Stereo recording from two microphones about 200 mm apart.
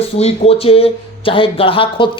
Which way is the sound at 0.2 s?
30° left (ahead or behind).